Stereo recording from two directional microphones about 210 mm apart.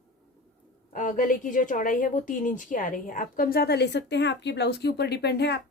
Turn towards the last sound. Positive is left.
turn(degrees=50)  # may be behind; listen again after turning